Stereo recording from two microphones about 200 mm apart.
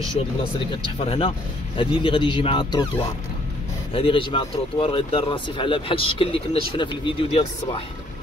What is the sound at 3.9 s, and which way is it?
A man's voice, 25° left (ahead or behind).